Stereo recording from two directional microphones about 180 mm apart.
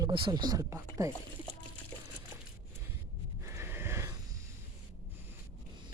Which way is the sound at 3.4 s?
15° right (ahead or behind).